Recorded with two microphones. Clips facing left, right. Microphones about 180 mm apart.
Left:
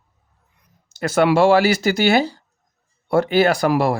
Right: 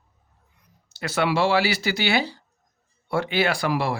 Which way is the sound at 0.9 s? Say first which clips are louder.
Left 7 dB; 45° left (ahead or behind).